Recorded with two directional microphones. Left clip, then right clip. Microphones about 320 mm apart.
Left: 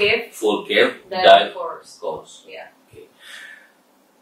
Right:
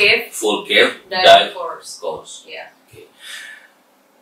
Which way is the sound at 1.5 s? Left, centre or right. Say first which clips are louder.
Right 2 dB; centre.